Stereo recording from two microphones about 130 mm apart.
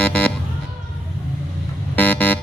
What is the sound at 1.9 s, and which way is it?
Vehicle, 15° left (ahead or behind).